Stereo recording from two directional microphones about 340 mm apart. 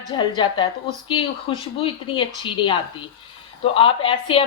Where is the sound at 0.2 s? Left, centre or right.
Centre.